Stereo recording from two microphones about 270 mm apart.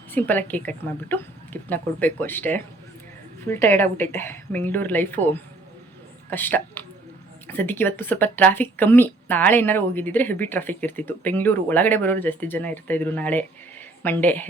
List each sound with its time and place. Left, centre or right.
0.1 s a woman's voice: centre